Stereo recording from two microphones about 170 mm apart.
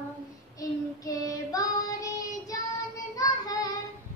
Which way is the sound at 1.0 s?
20° left (ahead or behind).